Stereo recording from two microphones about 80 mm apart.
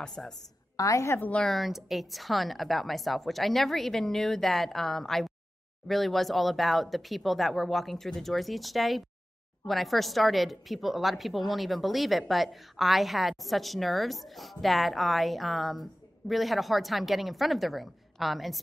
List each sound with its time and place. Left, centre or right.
0.0 s a woman's voice: centre
0.7 s a woman's voice: left
1.4 s a woman's voice: centre